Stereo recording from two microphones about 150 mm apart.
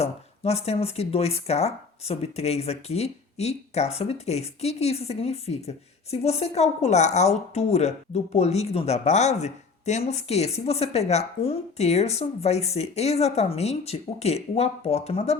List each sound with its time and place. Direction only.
0.0 s speech: 45° left (ahead or behind)